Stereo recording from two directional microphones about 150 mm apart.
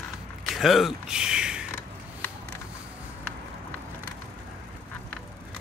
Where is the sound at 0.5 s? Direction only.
Centre (ahead or behind).